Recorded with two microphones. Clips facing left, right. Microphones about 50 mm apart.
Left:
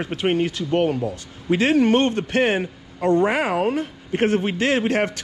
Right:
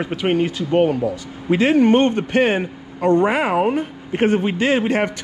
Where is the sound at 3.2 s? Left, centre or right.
Right.